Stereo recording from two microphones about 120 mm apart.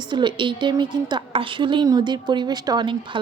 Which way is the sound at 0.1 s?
40° right (ahead or behind).